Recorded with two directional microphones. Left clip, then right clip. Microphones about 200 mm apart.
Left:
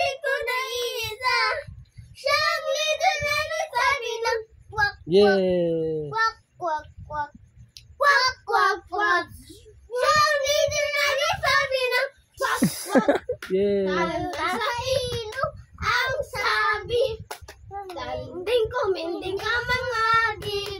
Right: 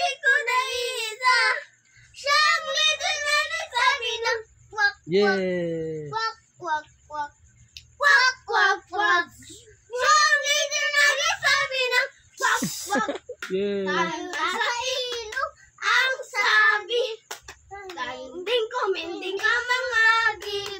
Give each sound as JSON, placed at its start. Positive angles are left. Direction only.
{"t": 0.0, "sound": "child singing", "side_deg": -10}
{"t": 5.5, "sound": "speech", "side_deg": 0}
{"t": 6.0, "sound": "child singing", "side_deg": -15}
{"t": 8.5, "sound": "child singing", "side_deg": -15}
{"t": 13.5, "sound": "speech", "side_deg": 5}
{"t": 13.8, "sound": "a sound", "side_deg": -15}
{"t": 19.4, "sound": "child singing", "side_deg": -15}